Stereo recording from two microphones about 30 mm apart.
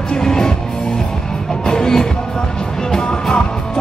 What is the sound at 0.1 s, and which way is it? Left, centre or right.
Music, left.